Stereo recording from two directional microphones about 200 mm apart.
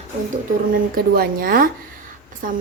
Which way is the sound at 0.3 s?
45° right (ahead or behind).